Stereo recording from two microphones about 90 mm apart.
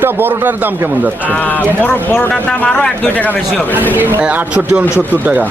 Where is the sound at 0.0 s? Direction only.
20° right (ahead or behind).